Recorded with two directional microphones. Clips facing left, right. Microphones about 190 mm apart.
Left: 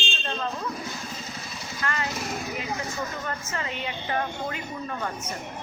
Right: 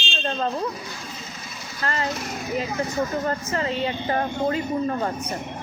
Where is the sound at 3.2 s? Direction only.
35° right (ahead or behind).